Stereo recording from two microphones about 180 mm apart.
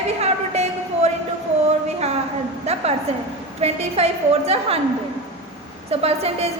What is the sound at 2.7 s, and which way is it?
A woman's voice, 35° right (ahead or behind).